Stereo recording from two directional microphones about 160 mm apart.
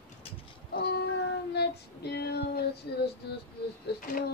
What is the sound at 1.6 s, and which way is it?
Child singing, 90° left.